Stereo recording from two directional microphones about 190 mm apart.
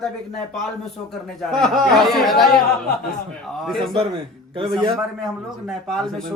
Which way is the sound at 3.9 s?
30° right (ahead or behind).